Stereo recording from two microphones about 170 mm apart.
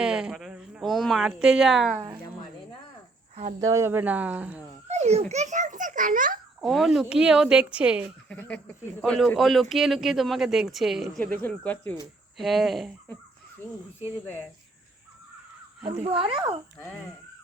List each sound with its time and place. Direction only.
0.0 s speech: 5° right (ahead or behind)
3.6 s speech: 15° right (ahead or behind)
4.9 s babbling: 40° right (ahead or behind)
5.3 s a child's voice: 45° right (ahead or behind)
6.6 s speech: centre (ahead or behind)
8.3 s speech: 10° left (ahead or behind)
16.0 s speech: 30° right (ahead or behind)